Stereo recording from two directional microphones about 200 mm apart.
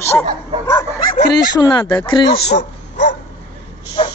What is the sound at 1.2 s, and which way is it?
Speech, 20° left (ahead or behind).